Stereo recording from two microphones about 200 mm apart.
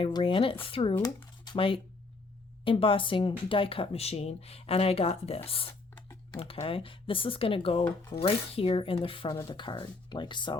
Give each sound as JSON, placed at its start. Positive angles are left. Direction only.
{"t": 0.0, "sound": "speech", "side_deg": 25}